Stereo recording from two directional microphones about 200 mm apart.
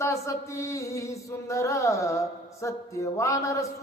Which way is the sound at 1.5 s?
15° left (ahead or behind).